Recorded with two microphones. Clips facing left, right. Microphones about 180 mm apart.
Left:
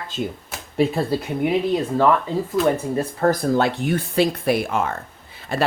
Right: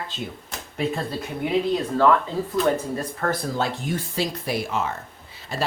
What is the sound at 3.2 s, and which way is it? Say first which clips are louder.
Speech: left 7 dB; 30° left (ahead or behind).